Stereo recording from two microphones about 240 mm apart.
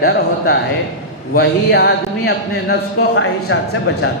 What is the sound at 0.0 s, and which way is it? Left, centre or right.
A man's voice, left.